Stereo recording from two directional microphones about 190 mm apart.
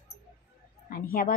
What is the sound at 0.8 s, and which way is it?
Speech, 50° left (ahead or behind).